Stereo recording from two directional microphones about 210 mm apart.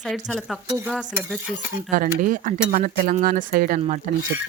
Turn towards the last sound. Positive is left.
turn(degrees=-35)  # may be behind; listen again after turning